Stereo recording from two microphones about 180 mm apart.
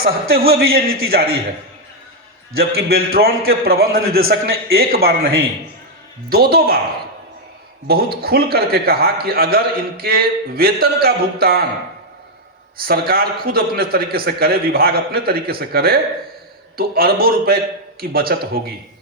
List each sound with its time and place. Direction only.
0.0 s a man's voice: 55° right (ahead or behind)
2.6 s a man's voice: 55° right (ahead or behind)
7.9 s a man's voice: 60° right (ahead or behind)
12.8 s a man's voice: 55° right (ahead or behind)